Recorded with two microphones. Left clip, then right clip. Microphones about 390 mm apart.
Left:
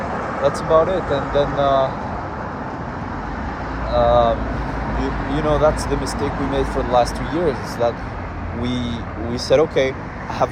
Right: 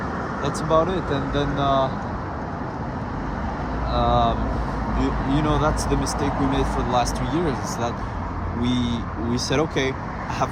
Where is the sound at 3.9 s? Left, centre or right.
Centre.